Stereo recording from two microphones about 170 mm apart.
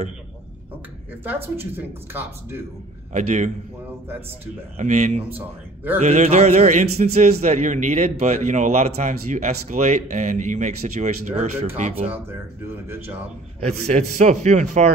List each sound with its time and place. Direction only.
1.2 s speech: 10° right (ahead or behind)
3.1 s a man's voice: 45° right (ahead or behind)
4.7 s a man's voice: 45° right (ahead or behind)
12.8 s speech: 15° right (ahead or behind)
13.7 s a man's voice: 40° right (ahead or behind)